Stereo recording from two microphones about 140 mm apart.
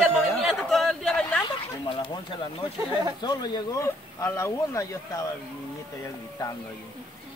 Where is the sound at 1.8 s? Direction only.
35° left (ahead or behind).